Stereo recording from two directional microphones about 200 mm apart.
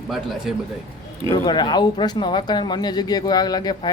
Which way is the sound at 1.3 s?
20° left (ahead or behind).